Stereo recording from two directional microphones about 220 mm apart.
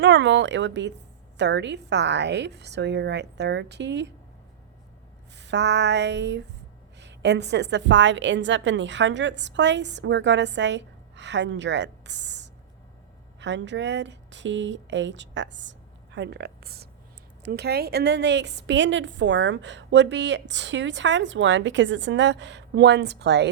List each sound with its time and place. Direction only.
0.0 s a woman's voice: 55° right (ahead or behind)
5.4 s a woman's voice: 50° right (ahead or behind)